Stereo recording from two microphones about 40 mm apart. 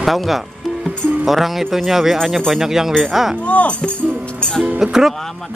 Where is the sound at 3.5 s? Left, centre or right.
Left.